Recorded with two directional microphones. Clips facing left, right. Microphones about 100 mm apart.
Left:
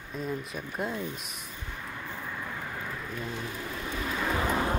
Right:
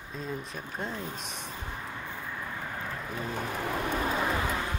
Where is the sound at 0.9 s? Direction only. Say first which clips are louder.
Left 2 dB; 35° right (ahead or behind).